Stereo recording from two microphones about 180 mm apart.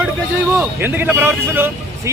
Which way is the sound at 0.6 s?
10° right (ahead or behind).